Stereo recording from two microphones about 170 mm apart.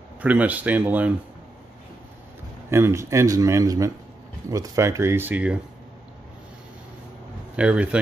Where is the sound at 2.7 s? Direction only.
15° right (ahead or behind).